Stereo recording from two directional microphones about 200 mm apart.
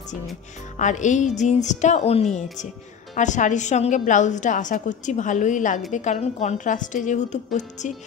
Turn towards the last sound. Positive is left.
turn(degrees=35)  # may be behind; listen again after turning